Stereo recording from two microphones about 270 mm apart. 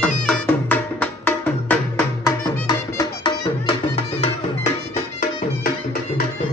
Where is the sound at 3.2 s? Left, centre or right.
Left.